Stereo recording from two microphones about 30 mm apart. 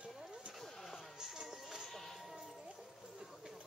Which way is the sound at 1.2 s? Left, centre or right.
Centre.